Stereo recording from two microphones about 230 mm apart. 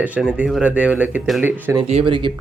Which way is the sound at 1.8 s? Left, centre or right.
Right.